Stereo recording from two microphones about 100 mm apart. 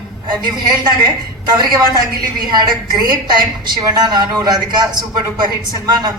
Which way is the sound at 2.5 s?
45° right (ahead or behind).